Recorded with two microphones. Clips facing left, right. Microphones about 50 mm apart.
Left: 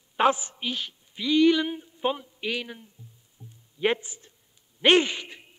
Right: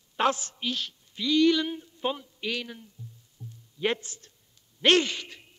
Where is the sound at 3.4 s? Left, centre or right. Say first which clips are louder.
Right 4 dB; left.